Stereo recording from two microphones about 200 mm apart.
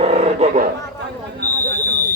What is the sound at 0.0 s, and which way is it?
Roar, 35° right (ahead or behind).